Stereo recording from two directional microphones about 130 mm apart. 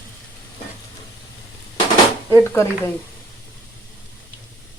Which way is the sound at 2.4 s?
20° left (ahead or behind).